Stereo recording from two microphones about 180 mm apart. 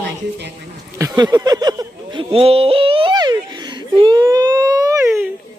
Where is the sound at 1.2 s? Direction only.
20° right (ahead or behind).